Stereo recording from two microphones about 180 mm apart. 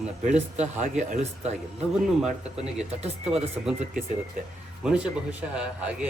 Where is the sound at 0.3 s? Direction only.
40° right (ahead or behind).